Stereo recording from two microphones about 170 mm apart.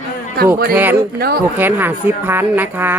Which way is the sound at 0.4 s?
70° right (ahead or behind).